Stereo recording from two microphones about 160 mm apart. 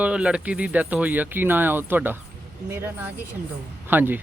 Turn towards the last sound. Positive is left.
turn(degrees=-10)  # may be behind; listen again after turning